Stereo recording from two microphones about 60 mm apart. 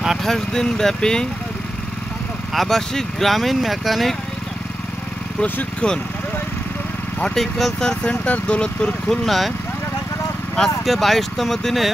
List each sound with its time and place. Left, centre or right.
0.0 s vehicle: centre
0.3 s speech: centre
2.5 s speech: centre
5.4 s speech: centre
7.3 s speech: centre
8.0 s speech: left
9.2 s speech: centre
10.9 s speech: centre